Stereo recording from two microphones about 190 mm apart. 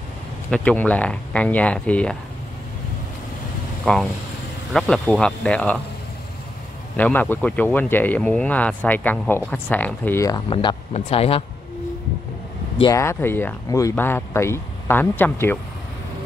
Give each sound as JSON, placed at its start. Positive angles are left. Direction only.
{"t": 0.5, "sound": "speech", "side_deg": 5}
{"t": 3.8, "sound": "speech", "side_deg": 0}
{"t": 7.0, "sound": "speech", "side_deg": 10}
{"t": 10.5, "sound": "speech", "side_deg": 25}
{"t": 12.8, "sound": "speech", "side_deg": 15}